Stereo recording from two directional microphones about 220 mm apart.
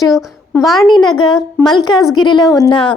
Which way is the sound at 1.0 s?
20° left (ahead or behind).